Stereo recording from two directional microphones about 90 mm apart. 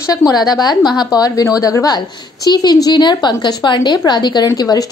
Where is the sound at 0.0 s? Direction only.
45° left (ahead or behind).